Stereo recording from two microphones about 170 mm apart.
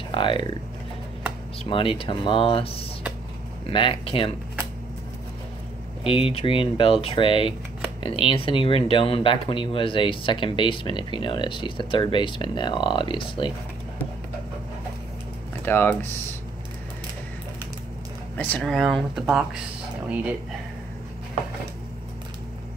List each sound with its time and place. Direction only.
0.1 s speech: 30° left (ahead or behind)
1.6 s speech: 30° left (ahead or behind)
6.0 s speech: 30° left (ahead or behind)
15.6 s speech: 10° left (ahead or behind)
18.3 s speech: 10° left (ahead or behind)